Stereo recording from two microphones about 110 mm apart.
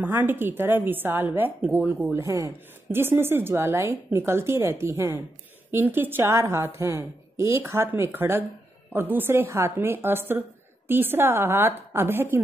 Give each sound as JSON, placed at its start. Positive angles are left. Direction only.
{"t": 0.0, "sound": "a woman's voice", "side_deg": -15}
{"t": 2.1, "sound": "a woman's voice", "side_deg": -25}